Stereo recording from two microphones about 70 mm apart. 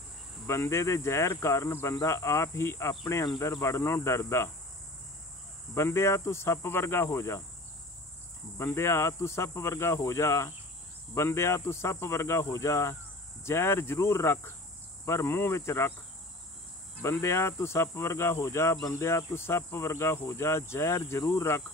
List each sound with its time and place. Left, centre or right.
0.5 s speech: left
5.8 s speech: left
8.5 s speech: left
17.0 s speech: left